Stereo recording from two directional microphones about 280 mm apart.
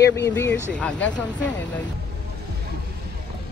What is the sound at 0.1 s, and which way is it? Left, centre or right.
Speech, centre.